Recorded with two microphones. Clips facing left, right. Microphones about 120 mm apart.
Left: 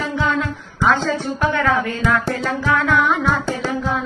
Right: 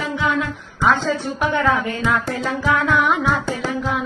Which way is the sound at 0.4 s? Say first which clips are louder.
Left 1 dB; 20° right (ahead or behind).